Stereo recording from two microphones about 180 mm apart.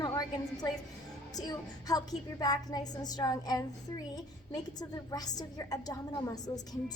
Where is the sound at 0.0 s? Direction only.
20° left (ahead or behind).